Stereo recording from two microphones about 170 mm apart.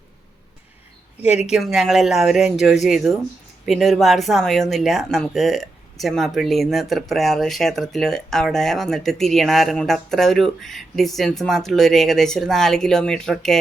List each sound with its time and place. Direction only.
1.2 s speech: 40° left (ahead or behind)
1.5 s speech: centre (ahead or behind)